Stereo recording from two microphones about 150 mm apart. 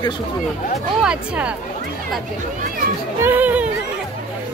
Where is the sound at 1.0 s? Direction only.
5° right (ahead or behind).